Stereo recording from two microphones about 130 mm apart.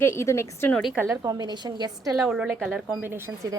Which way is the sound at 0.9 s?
15° right (ahead or behind).